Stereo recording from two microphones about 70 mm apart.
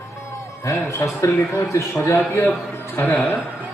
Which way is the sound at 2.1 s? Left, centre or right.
Left.